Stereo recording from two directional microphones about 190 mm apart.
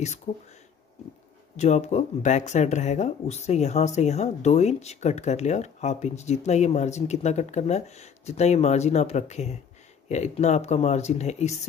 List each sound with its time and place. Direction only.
1.6 s speech: 35° left (ahead or behind)